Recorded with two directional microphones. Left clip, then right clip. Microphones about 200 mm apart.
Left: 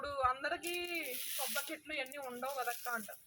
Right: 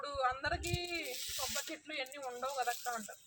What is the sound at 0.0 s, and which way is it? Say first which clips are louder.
Speech: left 1 dB; centre (ahead or behind).